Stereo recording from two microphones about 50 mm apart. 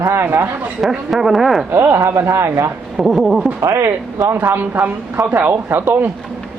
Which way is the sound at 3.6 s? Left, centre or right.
Right.